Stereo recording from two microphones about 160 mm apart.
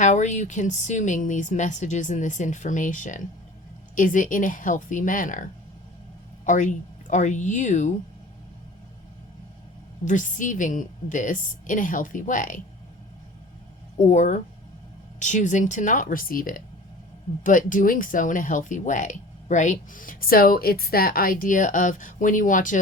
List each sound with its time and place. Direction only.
0.0 s a woman's voice: 50° left (ahead or behind)
10.1 s a woman's voice: 50° left (ahead or behind)
14.0 s a woman's voice: 50° left (ahead or behind)